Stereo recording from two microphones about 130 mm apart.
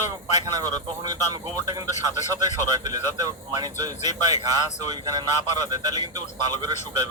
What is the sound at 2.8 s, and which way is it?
Speech, 30° right (ahead or behind).